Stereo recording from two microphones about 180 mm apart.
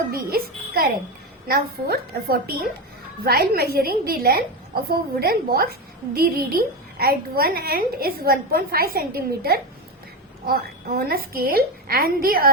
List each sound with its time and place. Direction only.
0.1 s a woman's voice: 55° right (ahead or behind)